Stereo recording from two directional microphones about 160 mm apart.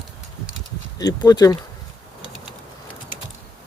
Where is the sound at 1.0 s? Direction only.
25° left (ahead or behind).